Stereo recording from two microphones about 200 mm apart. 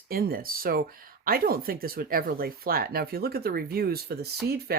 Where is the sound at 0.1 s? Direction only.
50° right (ahead or behind).